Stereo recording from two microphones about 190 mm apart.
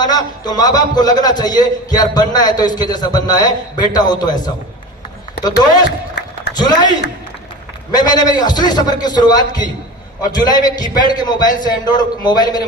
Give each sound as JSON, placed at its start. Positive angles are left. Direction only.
{"t": 0.0, "sound": "a man's voice", "side_deg": 20}
{"t": 7.9, "sound": "a man's voice", "side_deg": 20}